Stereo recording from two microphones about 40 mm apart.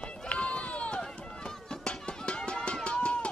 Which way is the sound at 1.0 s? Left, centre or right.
Centre.